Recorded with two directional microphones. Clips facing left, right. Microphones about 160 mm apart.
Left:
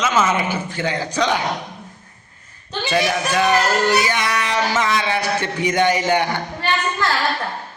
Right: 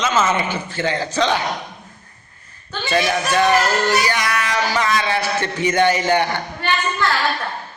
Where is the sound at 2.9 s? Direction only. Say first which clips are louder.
Right 1 dB; 10° left (ahead or behind).